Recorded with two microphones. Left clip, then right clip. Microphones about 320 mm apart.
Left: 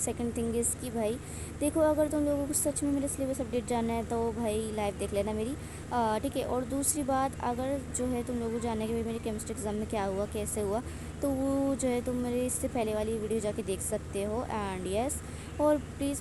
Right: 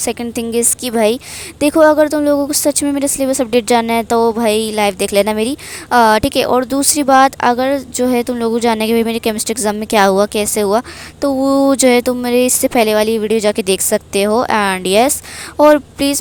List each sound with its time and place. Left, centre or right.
0.0 s a woman's voice: right